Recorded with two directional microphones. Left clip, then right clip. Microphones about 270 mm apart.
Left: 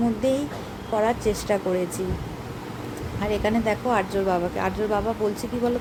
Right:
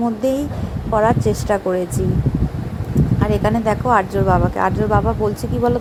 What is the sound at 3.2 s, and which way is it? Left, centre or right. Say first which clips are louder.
Speech: right 4 dB; centre.